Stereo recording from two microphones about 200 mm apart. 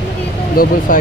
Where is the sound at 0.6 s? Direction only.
45° left (ahead or behind).